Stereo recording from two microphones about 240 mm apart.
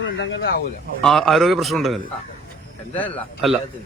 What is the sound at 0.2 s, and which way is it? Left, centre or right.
Speech, left.